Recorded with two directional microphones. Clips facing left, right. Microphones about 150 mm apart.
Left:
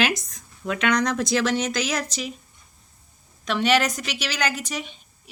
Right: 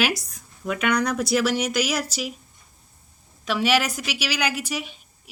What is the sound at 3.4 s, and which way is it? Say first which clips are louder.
Speech: left 1 dB; 5° right (ahead or behind).